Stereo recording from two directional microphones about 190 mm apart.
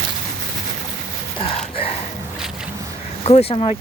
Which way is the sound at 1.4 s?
30° left (ahead or behind).